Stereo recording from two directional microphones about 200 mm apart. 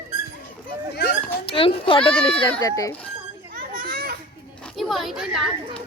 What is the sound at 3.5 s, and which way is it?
Children playing, 45° right (ahead or behind).